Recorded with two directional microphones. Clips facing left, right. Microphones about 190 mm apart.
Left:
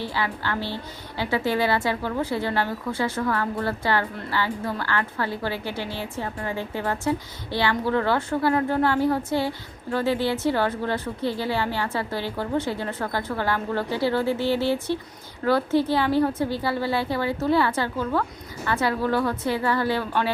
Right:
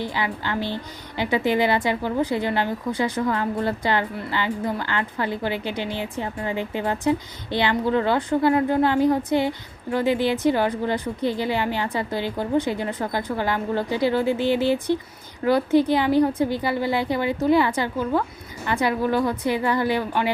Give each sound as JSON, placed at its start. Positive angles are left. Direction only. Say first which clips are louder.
{"t": 0.0, "sound": "a woman's voice", "louder": "right 1 dB", "side_deg": -15}